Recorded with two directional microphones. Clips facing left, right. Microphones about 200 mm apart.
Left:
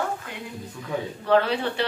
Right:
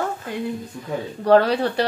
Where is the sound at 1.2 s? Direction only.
40° right (ahead or behind).